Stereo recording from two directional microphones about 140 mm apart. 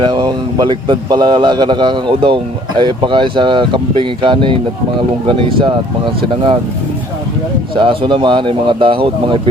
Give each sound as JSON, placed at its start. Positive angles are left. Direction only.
{"t": 0.0, "sound": "a man's voice", "side_deg": -35}
{"t": 7.8, "sound": "a man's voice", "side_deg": -35}